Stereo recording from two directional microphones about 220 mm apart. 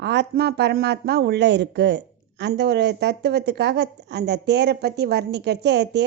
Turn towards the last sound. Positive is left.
turn(degrees=-50)  # may be behind; listen again after turning